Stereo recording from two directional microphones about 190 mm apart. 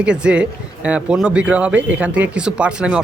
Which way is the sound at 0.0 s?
5° right (ahead or behind).